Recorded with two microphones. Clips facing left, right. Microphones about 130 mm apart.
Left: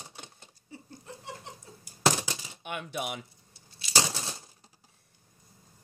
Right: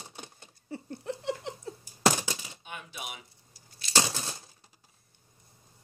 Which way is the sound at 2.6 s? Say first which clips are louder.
Left 8 dB; 65° left (ahead or behind).